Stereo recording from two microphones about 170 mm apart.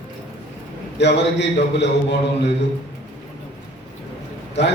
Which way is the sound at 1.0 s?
90° left.